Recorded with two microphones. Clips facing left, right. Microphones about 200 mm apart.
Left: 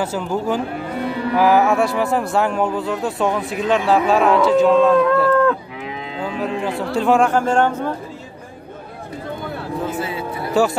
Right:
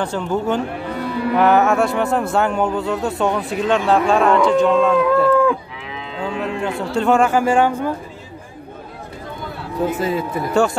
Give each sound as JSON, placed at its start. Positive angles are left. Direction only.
{"t": 0.0, "sound": "a man's voice", "side_deg": 5}
{"t": 5.3, "sound": "moo", "side_deg": -10}
{"t": 6.2, "sound": "a man's voice", "side_deg": 0}
{"t": 9.9, "sound": "a man's voice", "side_deg": -40}
{"t": 10.5, "sound": "a man's voice", "side_deg": 0}